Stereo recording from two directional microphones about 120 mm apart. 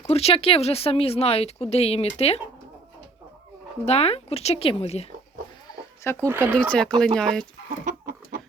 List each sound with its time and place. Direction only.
0.1 s speech: 55° left (ahead or behind)
3.8 s speech: 60° left (ahead or behind)
5.6 s a sound: 20° left (ahead or behind)
6.2 s speech: 20° right (ahead or behind)
6.6 s speech: 5° left (ahead or behind)
7.9 s chicken: 90° right